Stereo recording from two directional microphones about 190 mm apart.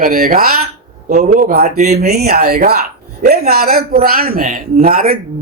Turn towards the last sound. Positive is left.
turn(degrees=-50)  # may be behind; listen again after turning